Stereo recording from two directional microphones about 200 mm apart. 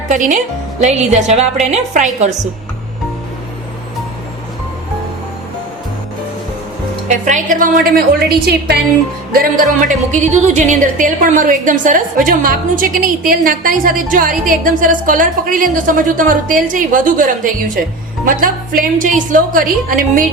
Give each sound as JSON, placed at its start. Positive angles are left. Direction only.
{"t": 0.1, "sound": "a woman's voice", "side_deg": -40}
{"t": 7.1, "sound": "a woman's voice", "side_deg": -40}